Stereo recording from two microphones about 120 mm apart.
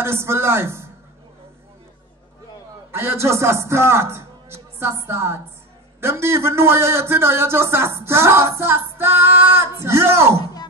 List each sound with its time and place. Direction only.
0.0 s a man's voice: 20° right (ahead or behind)
2.9 s a man's voice: 20° right (ahead or behind)